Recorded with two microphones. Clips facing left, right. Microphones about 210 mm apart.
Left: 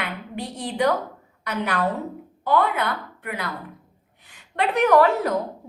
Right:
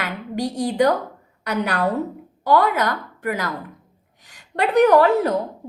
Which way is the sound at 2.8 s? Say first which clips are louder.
Right 4 dB; 40° right (ahead or behind).